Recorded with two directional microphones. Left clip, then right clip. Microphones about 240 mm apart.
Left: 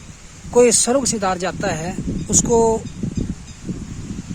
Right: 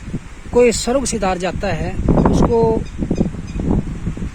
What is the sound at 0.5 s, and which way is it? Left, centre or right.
Speech, centre.